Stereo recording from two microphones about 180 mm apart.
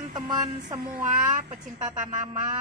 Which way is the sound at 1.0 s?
45° right (ahead or behind).